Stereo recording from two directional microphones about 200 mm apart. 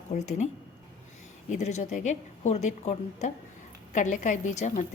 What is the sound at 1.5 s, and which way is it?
A woman's voice, 35° left (ahead or behind).